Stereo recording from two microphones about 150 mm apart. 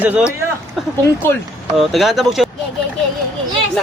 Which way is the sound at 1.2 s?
15° left (ahead or behind).